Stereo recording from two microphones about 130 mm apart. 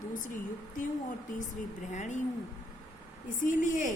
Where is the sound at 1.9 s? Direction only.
70° left (ahead or behind).